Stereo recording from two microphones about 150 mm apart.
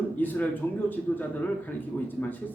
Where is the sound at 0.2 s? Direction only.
10° left (ahead or behind).